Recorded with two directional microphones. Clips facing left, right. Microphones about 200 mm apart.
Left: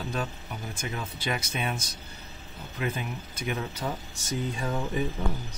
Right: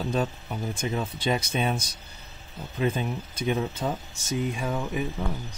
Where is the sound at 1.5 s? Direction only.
30° right (ahead or behind).